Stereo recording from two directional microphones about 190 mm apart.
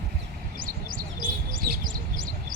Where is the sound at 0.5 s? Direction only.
45° right (ahead or behind).